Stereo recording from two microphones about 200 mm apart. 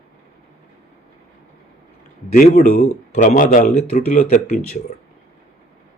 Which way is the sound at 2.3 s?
35° left (ahead or behind).